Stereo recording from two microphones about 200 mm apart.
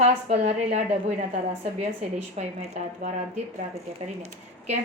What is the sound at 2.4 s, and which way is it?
A woman's voice, 35° right (ahead or behind).